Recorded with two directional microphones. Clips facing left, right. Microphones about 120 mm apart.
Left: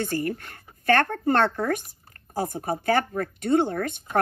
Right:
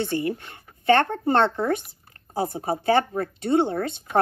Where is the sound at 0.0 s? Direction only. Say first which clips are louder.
Right 2 dB; 20° right (ahead or behind).